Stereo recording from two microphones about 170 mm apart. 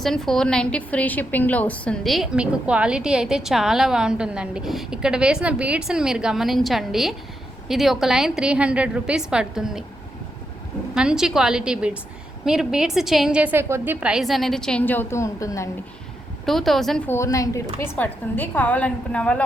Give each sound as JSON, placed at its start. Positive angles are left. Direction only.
{"t": 0.0, "sound": "a woman's voice", "side_deg": 0}
{"t": 10.9, "sound": "a woman's voice", "side_deg": -5}
{"t": 16.5, "sound": "a woman's voice", "side_deg": 0}
{"t": 17.1, "sound": "a woman's voice", "side_deg": 15}